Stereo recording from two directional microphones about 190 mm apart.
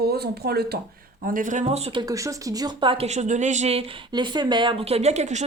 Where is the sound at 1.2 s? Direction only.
45° right (ahead or behind).